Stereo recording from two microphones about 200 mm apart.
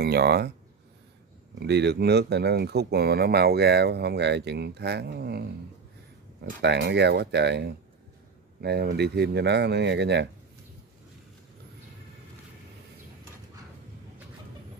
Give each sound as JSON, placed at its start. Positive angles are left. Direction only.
{"t": 0.0, "sound": "speech", "side_deg": -55}
{"t": 1.6, "sound": "speech", "side_deg": -55}
{"t": 6.6, "sound": "speech", "side_deg": -60}
{"t": 8.9, "sound": "speech", "side_deg": -55}